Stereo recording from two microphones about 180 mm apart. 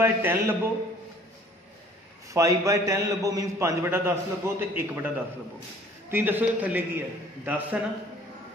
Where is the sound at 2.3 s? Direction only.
15° right (ahead or behind).